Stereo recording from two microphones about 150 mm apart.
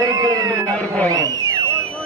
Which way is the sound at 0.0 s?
25° right (ahead or behind).